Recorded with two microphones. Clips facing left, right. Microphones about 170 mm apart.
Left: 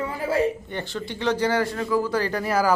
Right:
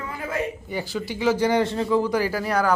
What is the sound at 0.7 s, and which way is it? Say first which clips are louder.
Speech: right 2 dB; 5° right (ahead or behind).